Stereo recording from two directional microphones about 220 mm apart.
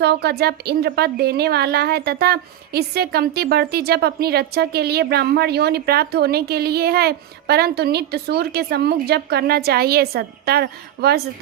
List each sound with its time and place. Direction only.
0.0 s a woman's voice: 45° right (ahead or behind)